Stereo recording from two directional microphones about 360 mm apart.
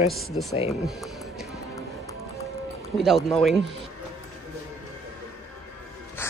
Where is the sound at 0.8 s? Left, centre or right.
Centre.